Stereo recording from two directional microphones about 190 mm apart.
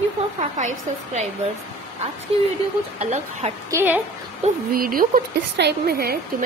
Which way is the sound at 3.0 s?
35° right (ahead or behind).